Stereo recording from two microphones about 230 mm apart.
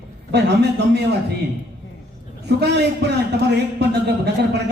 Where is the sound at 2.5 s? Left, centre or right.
Right.